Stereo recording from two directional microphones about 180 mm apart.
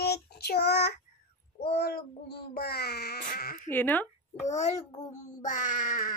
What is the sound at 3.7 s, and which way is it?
Speech, 10° left (ahead or behind).